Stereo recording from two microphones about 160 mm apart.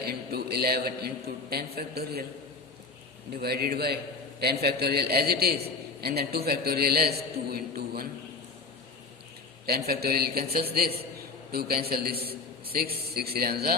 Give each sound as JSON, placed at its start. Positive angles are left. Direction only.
{"t": 0.0, "sound": "a man's voice", "side_deg": -80}
{"t": 3.4, "sound": "a man's voice", "side_deg": -75}
{"t": 4.4, "sound": "a man's voice", "side_deg": -85}
{"t": 9.6, "sound": "a man's voice", "side_deg": -75}